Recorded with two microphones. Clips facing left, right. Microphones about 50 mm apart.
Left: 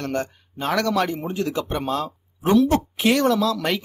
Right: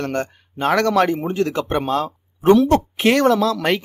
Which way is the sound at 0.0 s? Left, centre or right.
Right.